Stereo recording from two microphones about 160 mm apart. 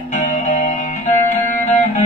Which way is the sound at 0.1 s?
50° left (ahead or behind).